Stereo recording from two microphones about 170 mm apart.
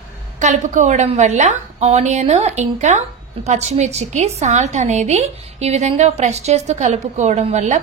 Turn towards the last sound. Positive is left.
turn(degrees=-45)  # may be behind; listen again after turning